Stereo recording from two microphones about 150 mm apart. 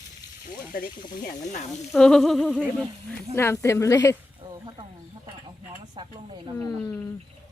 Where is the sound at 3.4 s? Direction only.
20° left (ahead or behind).